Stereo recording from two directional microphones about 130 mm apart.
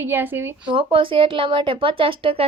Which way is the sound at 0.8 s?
40° right (ahead or behind).